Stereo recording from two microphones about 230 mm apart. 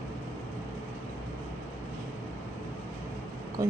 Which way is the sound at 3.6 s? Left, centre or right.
Centre.